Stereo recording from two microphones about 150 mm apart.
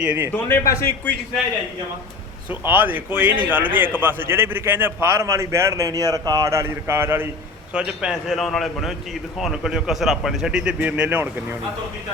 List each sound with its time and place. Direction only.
0.0 s a man's voice: 10° right (ahead or behind)
0.4 s a man's voice: 20° left (ahead or behind)
2.5 s a man's voice: 15° right (ahead or behind)